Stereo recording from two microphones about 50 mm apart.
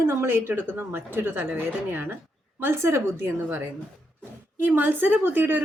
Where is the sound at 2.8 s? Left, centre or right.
Right.